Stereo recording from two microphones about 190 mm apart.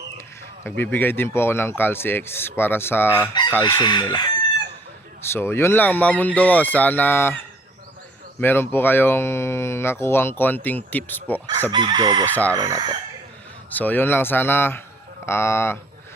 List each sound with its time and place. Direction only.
0.6 s speech: 10° left (ahead or behind)
3.6 s chicken: 20° left (ahead or behind)
5.2 s speech: 10° left (ahead or behind)
8.4 s speech: 10° left (ahead or behind)
11.7 s chicken: 25° right (ahead or behind)
12.2 s speech: 10° left (ahead or behind)
12.5 s chicken: 20° right (ahead or behind)
13.7 s speech: 10° left (ahead or behind)